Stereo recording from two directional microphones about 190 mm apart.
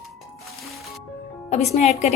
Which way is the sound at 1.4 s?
35° left (ahead or behind).